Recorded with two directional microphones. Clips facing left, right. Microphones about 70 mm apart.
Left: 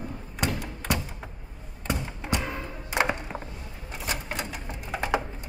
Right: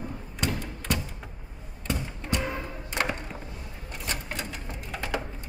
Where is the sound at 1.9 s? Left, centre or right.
Centre.